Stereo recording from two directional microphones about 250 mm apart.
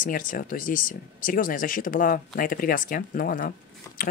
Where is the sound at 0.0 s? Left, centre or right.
Left.